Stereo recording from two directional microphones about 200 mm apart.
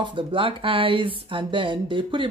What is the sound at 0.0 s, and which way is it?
Speech, 25° right (ahead or behind).